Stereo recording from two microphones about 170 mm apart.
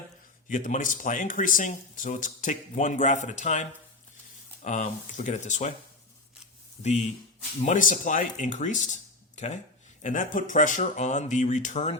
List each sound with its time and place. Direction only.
0.4 s speech: 50° left (ahead or behind)
7.6 s speech: 50° left (ahead or behind)